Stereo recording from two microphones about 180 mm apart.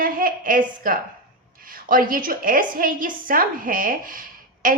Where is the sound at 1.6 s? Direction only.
50° right (ahead or behind).